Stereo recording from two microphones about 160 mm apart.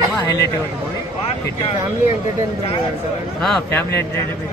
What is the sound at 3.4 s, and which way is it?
Speech, centre (ahead or behind).